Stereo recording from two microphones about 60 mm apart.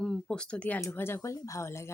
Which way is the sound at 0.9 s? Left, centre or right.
Left.